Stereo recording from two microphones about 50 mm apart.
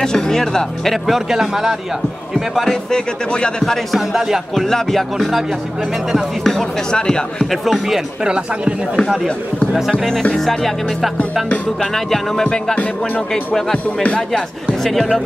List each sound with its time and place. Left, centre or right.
0.0 s speech: centre
1.0 s speech: centre
2.7 s speech: centre
3.9 s speech: centre
4.6 s speech: centre
6.4 s speech: centre
7.6 s speech: centre
8.2 s speech: centre
11.8 s speech: centre
14.8 s speech: centre